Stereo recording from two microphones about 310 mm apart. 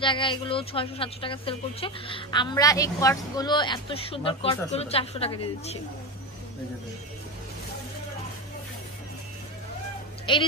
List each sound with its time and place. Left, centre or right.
0.0 s a woman's voice: centre
10.3 s a woman's voice: centre